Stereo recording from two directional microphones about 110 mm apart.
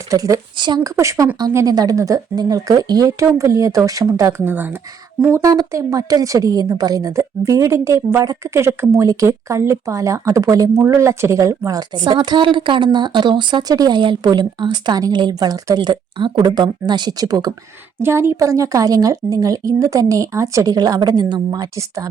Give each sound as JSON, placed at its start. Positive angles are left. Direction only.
{"t": 0.1, "sound": "a woman's voice", "side_deg": -30}
{"t": 0.5, "sound": "speech", "side_deg": -45}
{"t": 0.9, "sound": "a woman's voice", "side_deg": -30}
{"t": 18.0, "sound": "a woman's voice", "side_deg": -25}